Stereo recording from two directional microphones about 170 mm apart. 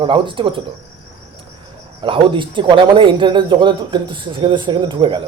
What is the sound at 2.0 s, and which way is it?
A man's voice, 30° right (ahead or behind).